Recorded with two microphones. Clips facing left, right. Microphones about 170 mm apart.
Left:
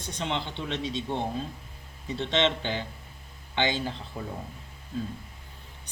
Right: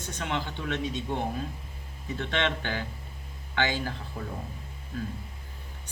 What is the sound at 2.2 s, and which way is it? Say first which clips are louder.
Speech: left 3 dB; 20° left (ahead or behind).